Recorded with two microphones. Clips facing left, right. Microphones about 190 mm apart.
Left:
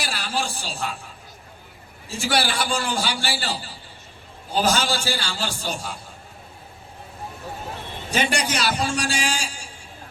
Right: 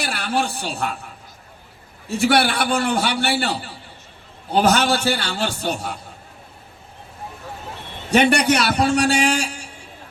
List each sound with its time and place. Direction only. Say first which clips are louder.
0.0 s a woman's voice: right 5 dB; 60° right (ahead or behind)
8.1 s a man's voice: right 8 dB; 65° right (ahead or behind)